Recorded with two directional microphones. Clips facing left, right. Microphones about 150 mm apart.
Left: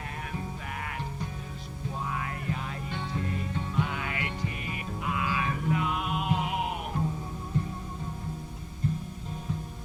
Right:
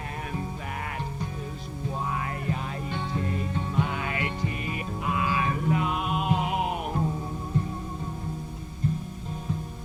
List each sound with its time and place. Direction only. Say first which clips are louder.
0.8 s music: right 2 dB; 35° right (ahead or behind)